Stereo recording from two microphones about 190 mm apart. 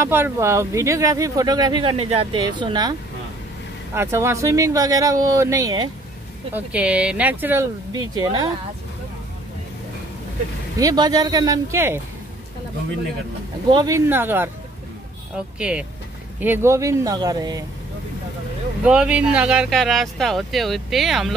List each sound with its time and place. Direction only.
0.0 s speech: 15° right (ahead or behind)
6.5 s speech: 5° right (ahead or behind)
7.9 s speech: 20° right (ahead or behind)
10.8 s speech: 20° right (ahead or behind)
13.7 s speech: 20° right (ahead or behind)
18.9 s speech: 5° right (ahead or behind)